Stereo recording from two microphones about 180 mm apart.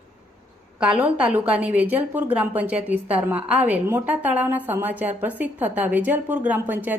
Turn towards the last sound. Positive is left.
turn(degrees=-10)  # may be behind; listen again after turning